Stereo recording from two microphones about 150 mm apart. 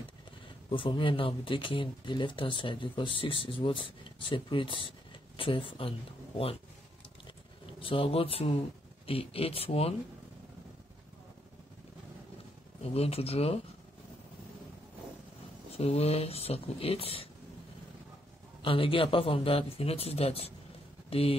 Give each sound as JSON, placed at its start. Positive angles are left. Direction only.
{"t": 0.7, "sound": "speech", "side_deg": 35}
{"t": 7.8, "sound": "speech", "side_deg": 35}
{"t": 12.8, "sound": "speech", "side_deg": 40}
{"t": 15.7, "sound": "speech", "side_deg": 40}
{"t": 18.6, "sound": "speech", "side_deg": 35}